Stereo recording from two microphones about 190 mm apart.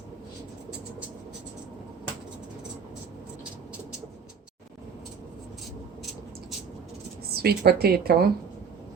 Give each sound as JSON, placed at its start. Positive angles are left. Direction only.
{"t": 7.3, "sound": "a woman's voice", "side_deg": -55}